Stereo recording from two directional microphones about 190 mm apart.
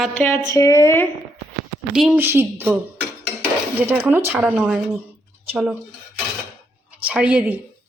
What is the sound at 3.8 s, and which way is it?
Speech, 10° right (ahead or behind).